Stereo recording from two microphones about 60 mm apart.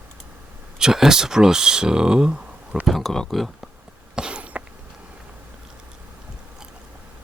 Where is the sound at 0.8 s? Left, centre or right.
Centre.